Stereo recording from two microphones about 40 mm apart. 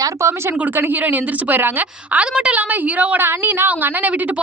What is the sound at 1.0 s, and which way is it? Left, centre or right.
Speech, right.